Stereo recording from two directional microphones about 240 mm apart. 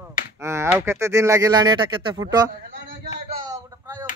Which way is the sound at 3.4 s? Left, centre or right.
Centre.